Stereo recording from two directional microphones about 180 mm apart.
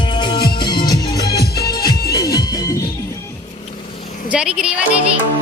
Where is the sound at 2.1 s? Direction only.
20° left (ahead or behind).